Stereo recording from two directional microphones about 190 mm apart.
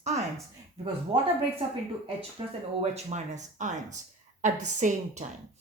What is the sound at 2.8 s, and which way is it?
A woman's voice, 35° right (ahead or behind).